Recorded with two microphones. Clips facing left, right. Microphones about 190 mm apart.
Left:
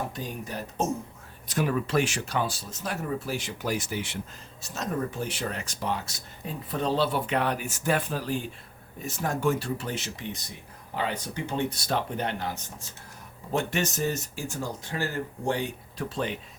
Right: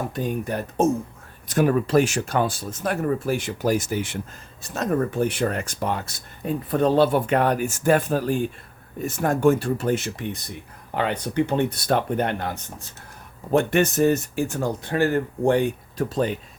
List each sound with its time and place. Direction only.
0.1 s speech: 55° right (ahead or behind)
4.6 s speech: 55° right (ahead or behind); by 16.4 s 40° right (ahead or behind)